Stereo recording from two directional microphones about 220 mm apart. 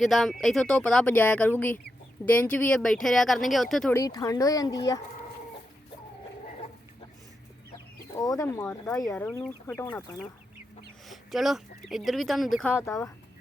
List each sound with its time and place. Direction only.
0.0 s speech: centre (ahead or behind)
3.9 s speech: 15° left (ahead or behind)
8.2 s speech: 15° left (ahead or behind)
11.1 s speech: centre (ahead or behind)